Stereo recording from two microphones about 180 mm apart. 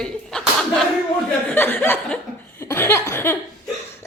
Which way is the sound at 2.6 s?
15° left (ahead or behind).